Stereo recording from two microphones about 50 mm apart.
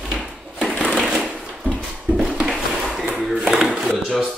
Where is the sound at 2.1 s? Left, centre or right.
Centre.